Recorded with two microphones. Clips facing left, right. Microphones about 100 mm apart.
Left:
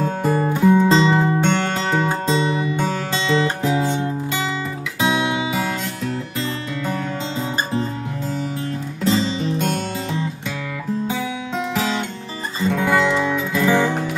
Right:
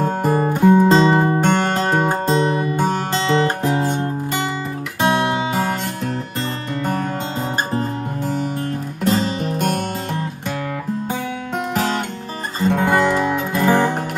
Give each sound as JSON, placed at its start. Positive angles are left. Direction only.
{"t": 0.0, "sound": "music", "side_deg": -45}
{"t": 9.0, "sound": "music", "side_deg": -55}
{"t": 12.5, "sound": "guitar", "side_deg": -45}